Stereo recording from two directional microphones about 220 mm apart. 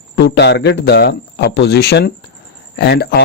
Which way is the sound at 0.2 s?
50° left (ahead or behind).